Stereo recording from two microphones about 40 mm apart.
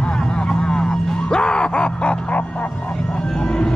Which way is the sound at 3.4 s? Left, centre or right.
Left.